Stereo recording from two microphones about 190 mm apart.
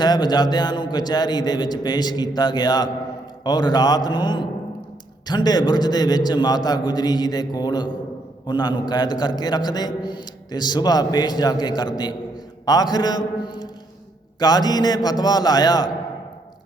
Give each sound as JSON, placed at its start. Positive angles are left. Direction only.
{"t": 0.0, "sound": "a man's voice", "side_deg": 20}